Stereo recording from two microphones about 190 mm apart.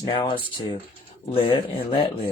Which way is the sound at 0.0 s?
25° left (ahead or behind).